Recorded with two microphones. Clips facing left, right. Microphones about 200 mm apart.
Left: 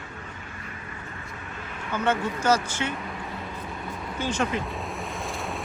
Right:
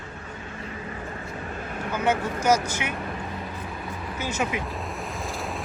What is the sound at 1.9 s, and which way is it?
Speech, 10° right (ahead or behind).